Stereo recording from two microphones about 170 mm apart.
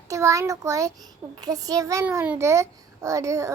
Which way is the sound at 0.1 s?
20° right (ahead or behind).